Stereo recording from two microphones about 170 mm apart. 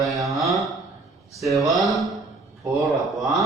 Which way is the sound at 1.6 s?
Centre (ahead or behind).